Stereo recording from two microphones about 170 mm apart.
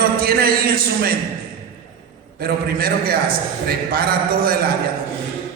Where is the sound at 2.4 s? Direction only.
60° right (ahead or behind).